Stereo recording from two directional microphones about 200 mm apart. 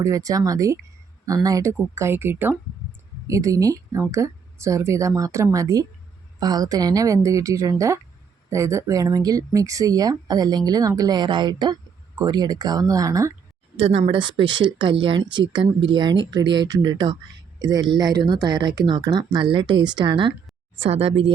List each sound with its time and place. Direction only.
0.0 s speech: 15° right (ahead or behind)
13.7 s speech: 30° right (ahead or behind)